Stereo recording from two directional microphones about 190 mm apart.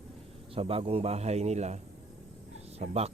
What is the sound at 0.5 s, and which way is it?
A man's voice, 30° right (ahead or behind).